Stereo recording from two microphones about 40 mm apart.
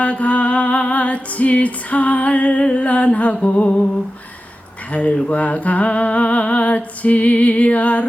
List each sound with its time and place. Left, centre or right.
0.0 s music: left
4.9 s music: left